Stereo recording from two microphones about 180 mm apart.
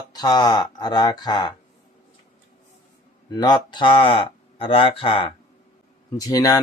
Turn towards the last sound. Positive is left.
turn(degrees=20)  # may be behind; listen again after turning